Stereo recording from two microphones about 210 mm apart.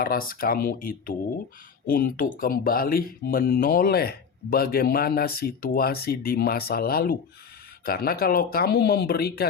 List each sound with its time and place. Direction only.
0.0 s speech: 45° left (ahead or behind)